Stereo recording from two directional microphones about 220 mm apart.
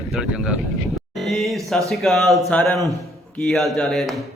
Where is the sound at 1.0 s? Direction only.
Centre (ahead or behind).